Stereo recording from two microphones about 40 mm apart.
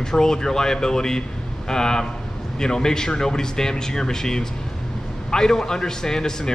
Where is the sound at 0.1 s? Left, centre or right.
Centre.